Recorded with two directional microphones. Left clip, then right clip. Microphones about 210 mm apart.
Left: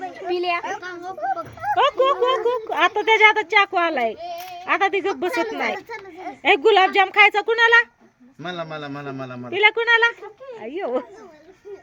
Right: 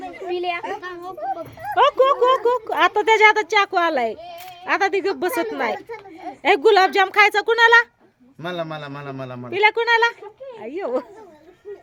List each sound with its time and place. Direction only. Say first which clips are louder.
0.3 s a sound: left 2 dB; 55° left (ahead or behind)
0.6 s speech: even; 10° right (ahead or behind)
8.4 s a man's voice: right 2 dB; 60° right (ahead or behind)
9.5 s speech: even; 10° right (ahead or behind)